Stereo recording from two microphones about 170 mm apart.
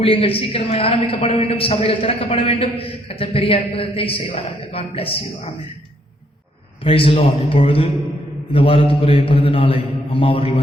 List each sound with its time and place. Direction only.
0.0 s a woman's voice: 35° left (ahead or behind)
6.8 s a woman's voice: 30° left (ahead or behind)